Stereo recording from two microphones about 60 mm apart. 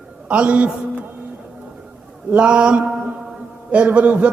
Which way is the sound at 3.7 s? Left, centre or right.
Right.